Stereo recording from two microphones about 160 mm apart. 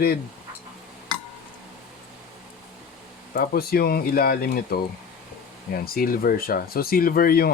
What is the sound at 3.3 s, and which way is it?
Speech, 75° left (ahead or behind).